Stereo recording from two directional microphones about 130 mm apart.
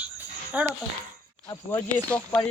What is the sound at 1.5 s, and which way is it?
Speech, 15° left (ahead or behind).